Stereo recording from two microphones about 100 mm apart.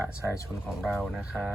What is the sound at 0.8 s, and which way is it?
Speech, centre (ahead or behind).